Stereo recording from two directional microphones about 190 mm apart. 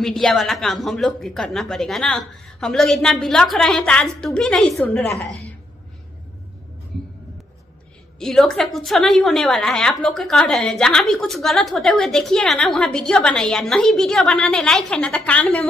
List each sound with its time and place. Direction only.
0.0 s a woman's voice: centre (ahead or behind)
8.2 s a woman's voice: 5° left (ahead or behind)